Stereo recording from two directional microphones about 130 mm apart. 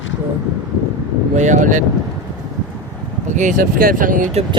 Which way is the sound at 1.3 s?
70° right (ahead or behind).